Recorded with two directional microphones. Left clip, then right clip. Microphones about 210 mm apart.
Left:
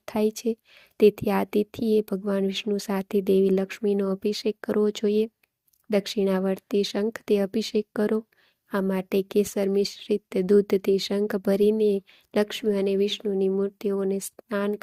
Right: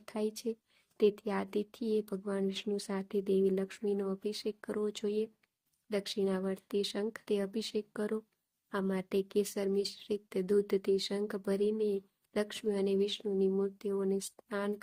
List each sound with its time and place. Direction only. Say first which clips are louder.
0.0 s speech: left 11 dB; 35° left (ahead or behind)